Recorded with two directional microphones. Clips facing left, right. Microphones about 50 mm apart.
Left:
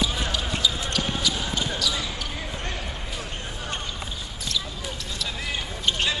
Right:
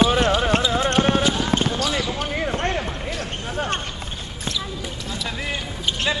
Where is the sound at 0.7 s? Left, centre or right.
Right.